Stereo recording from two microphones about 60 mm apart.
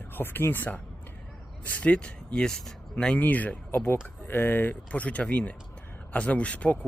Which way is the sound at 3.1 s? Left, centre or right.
Left.